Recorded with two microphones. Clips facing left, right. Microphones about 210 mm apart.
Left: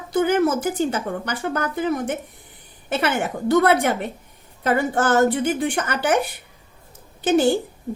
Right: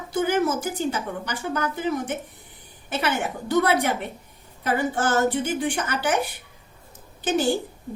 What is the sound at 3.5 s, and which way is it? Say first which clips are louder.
A woman's voice: left 4 dB; 50° left (ahead or behind).